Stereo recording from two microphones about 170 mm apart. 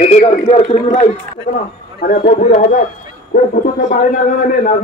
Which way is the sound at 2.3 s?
40° left (ahead or behind).